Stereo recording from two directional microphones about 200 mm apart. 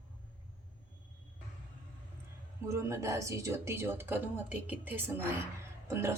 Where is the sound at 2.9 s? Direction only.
15° right (ahead or behind).